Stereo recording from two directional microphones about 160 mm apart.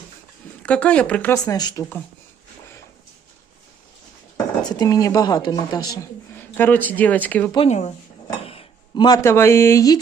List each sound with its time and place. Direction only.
0.6 s speech: 5° left (ahead or behind)
1.5 s speech: 25° left (ahead or behind)
4.8 s speech: 20° left (ahead or behind)
6.3 s speech: 10° left (ahead or behind)
7.7 s speech: 45° left (ahead or behind)
8.4 s a sound: 35° left (ahead or behind)
9.0 s speech: 20° left (ahead or behind)